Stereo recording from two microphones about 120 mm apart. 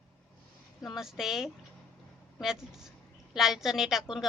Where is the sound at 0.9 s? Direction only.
5° right (ahead or behind).